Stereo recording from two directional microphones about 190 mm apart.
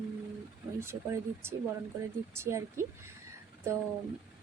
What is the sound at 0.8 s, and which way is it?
Speech, 15° right (ahead or behind).